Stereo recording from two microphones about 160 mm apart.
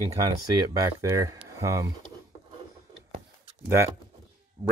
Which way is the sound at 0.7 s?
20° right (ahead or behind).